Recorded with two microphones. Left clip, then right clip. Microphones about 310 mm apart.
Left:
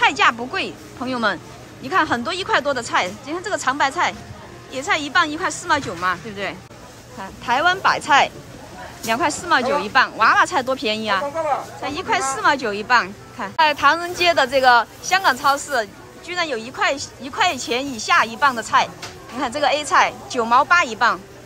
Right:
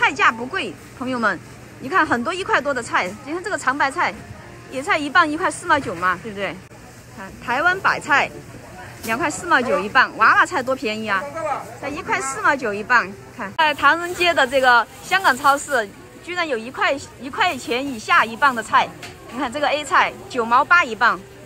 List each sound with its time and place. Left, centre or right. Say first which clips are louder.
0.0 s a woman's voice: left 1 dB; centre
9.6 s speech: even; left
9.9 s a woman's voice: right 1 dB; centre
12.4 s a woman's voice: left 1 dB; centre